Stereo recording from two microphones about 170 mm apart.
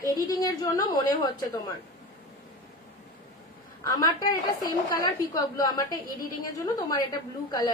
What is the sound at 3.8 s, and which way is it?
A woman's voice, 20° left (ahead or behind).